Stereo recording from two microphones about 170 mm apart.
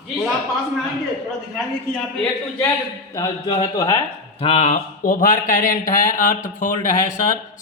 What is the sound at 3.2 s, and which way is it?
Speech, 20° left (ahead or behind).